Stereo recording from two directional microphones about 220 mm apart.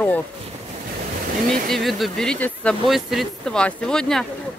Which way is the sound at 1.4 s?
Centre (ahead or behind).